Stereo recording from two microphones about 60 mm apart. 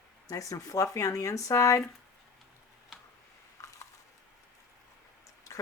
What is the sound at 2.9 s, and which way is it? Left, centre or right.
Tick-tock, centre.